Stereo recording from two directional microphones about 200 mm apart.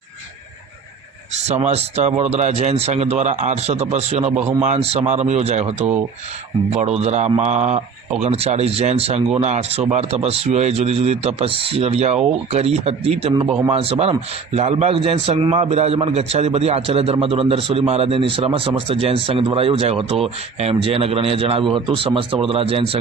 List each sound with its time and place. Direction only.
1.5 s a man's voice: 30° right (ahead or behind)